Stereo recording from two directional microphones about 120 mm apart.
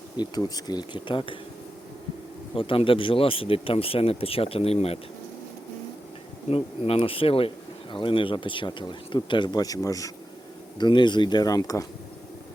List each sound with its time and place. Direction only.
0.2 s speech: 35° left (ahead or behind)
2.6 s speech: 45° left (ahead or behind)
6.5 s speech: 50° left (ahead or behind); by 10.1 s 30° left (ahead or behind)
10.8 s speech: 40° left (ahead or behind)